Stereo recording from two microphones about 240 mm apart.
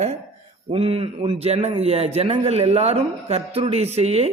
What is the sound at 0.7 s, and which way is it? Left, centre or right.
A man's voice, right.